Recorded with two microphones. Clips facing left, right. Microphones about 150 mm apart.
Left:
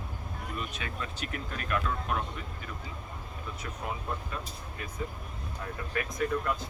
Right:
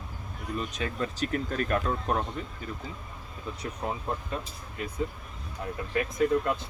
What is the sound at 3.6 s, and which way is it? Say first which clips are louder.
Speech: right 4 dB; 30° right (ahead or behind).